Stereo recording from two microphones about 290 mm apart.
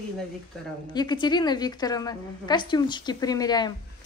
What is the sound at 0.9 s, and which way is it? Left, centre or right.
A woman's voice, centre.